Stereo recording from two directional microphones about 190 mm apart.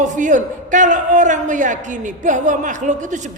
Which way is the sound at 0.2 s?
40° right (ahead or behind).